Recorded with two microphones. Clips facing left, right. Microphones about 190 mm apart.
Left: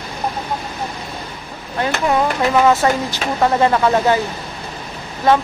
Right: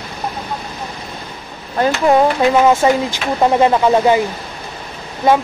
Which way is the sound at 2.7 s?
15° right (ahead or behind).